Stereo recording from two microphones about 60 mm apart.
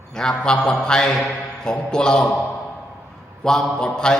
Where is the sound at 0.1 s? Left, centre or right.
Centre.